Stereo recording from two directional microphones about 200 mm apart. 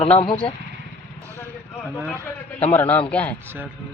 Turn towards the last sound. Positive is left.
turn(degrees=5)  # may be behind; listen again after turning